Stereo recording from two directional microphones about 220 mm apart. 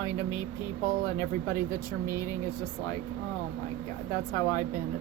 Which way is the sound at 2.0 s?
15° left (ahead or behind).